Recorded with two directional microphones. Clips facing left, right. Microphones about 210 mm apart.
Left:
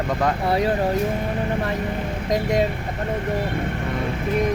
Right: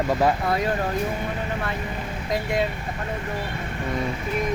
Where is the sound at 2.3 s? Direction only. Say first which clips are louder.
Left 4 dB; 40° left (ahead or behind).